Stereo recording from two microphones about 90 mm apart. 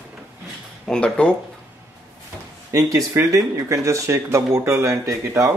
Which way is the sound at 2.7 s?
35° right (ahead or behind).